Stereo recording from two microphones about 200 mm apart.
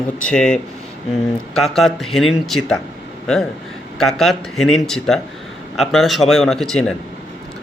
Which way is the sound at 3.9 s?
Centre (ahead or behind).